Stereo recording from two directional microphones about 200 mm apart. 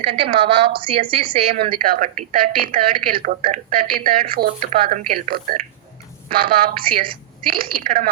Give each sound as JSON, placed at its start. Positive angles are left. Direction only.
{"t": 0.0, "sound": "a woman's voice", "side_deg": -25}
{"t": 1.7, "sound": "speech", "side_deg": -45}